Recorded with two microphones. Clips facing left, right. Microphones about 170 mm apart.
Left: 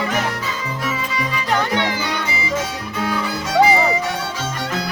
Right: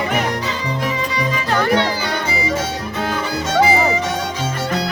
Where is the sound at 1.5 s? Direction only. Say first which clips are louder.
Right 3 dB; 20° left (ahead or behind).